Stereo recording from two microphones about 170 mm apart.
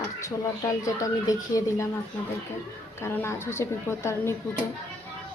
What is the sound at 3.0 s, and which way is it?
A woman's voice, 15° left (ahead or behind).